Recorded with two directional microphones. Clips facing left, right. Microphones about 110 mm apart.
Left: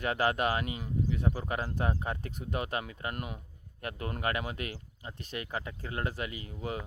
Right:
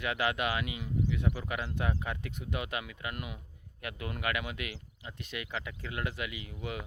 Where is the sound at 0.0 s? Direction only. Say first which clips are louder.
Left 3 dB; 40° left (ahead or behind).